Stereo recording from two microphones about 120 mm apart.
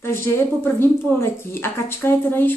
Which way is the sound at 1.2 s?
20° left (ahead or behind).